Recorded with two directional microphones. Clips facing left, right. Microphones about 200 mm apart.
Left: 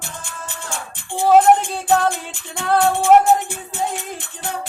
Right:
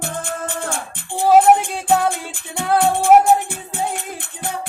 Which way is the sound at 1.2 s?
10° right (ahead or behind).